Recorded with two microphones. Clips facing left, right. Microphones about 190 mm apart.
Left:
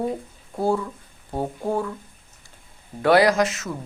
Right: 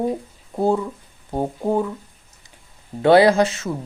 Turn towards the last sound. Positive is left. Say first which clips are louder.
# right 4 dB
turn(degrees=-30)  # may be behind; listen again after turning